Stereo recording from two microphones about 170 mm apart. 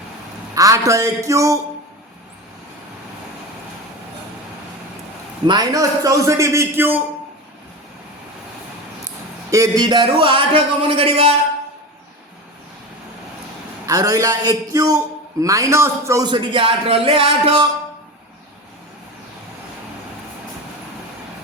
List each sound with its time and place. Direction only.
0.5 s a man's voice: 20° right (ahead or behind)
5.5 s a man's voice: 20° right (ahead or behind)
9.5 s speech: 20° right (ahead or behind)
13.8 s a man's voice: 20° right (ahead or behind)